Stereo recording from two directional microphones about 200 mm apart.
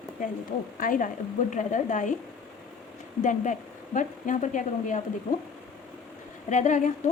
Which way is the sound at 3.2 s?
40° left (ahead or behind).